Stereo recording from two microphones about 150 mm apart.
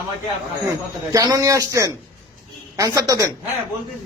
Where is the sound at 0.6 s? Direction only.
25° right (ahead or behind).